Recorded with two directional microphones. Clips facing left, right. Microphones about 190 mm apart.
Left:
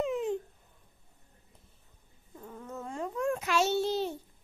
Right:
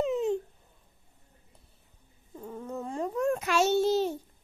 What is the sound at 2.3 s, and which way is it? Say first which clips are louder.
Babbling: right 5 dB; 25° right (ahead or behind).